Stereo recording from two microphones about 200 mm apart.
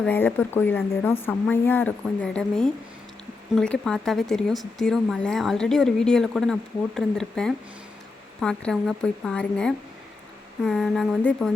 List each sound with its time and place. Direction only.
0.0 s a woman's voice: 10° left (ahead or behind)